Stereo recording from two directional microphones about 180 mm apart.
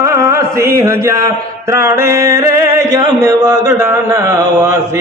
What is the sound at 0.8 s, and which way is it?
Mantra, 15° right (ahead or behind).